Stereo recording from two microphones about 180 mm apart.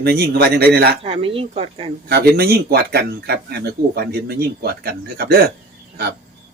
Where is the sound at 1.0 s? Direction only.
30° right (ahead or behind).